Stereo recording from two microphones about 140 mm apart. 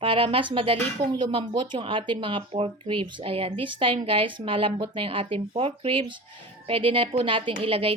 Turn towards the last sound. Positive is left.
turn(degrees=-40)  # may be behind; listen again after turning